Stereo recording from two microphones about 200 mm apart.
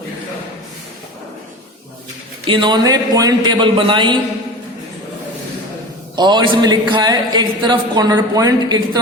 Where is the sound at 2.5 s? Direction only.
20° right (ahead or behind).